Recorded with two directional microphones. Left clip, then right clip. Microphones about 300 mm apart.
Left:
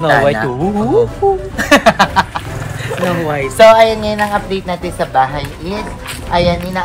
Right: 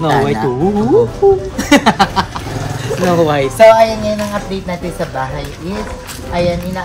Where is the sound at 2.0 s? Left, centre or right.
Left.